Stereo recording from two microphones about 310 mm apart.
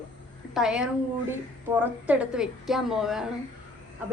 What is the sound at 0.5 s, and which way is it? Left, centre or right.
A woman's voice, centre.